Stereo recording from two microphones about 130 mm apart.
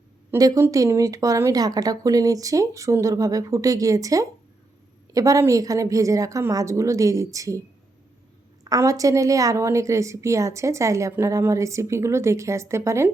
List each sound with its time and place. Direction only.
0.3 s a woman's voice: 25° right (ahead or behind)
8.6 s a woman's voice: 25° right (ahead or behind)